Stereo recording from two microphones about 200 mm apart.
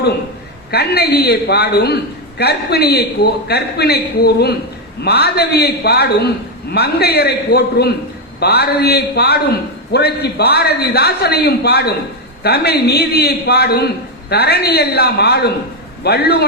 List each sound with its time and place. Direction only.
0.7 s a man's voice: 55° left (ahead or behind)